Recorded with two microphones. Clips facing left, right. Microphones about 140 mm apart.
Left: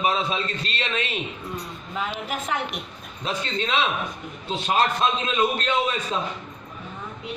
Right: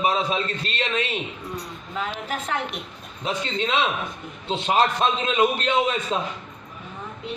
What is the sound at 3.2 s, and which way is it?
A man's voice, 20° right (ahead or behind).